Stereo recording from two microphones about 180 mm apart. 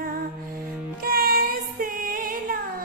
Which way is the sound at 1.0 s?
55° right (ahead or behind).